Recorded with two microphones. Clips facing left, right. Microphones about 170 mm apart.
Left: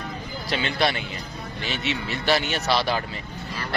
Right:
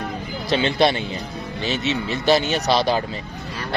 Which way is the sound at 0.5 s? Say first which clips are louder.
Right 6 dB; 25° right (ahead or behind).